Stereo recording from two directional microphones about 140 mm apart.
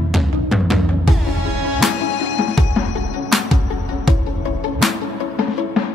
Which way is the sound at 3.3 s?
Centre (ahead or behind).